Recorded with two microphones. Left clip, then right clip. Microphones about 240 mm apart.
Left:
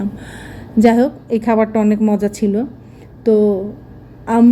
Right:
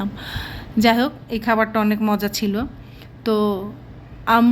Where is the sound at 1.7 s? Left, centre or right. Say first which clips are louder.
Left 4 dB; centre.